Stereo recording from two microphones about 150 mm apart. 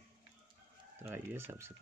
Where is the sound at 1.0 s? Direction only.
15° right (ahead or behind).